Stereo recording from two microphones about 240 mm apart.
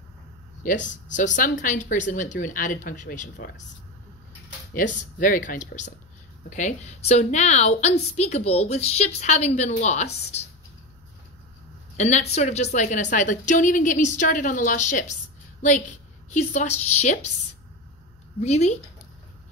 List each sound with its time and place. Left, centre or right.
0.8 s a woman's voice: left
5.2 s a woman's voice: left
12.0 s a woman's voice: left
16.3 s a woman's voice: left
18.4 s a woman's voice: left